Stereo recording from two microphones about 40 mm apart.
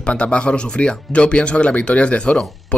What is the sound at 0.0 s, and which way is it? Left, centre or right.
Speech, left.